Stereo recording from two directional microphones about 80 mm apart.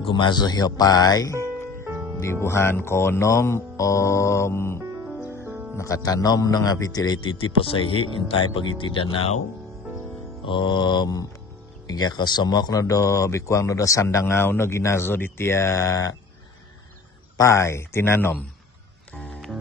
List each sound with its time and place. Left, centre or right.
0.1 s speech: left
2.1 s speech: left
5.3 s music: right
5.8 s speech: left
7.2 s speech: left
8.5 s speech: left
10.4 s mantra: left
11.9 s speech: left
17.4 s speech: left